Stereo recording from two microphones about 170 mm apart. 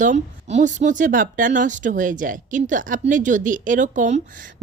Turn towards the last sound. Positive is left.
turn(degrees=-50)  # may be behind; listen again after turning